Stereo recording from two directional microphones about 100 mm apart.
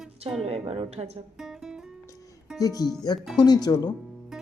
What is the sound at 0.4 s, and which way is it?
Speech, 90° right.